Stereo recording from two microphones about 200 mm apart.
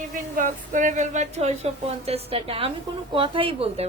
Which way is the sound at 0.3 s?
40° right (ahead or behind).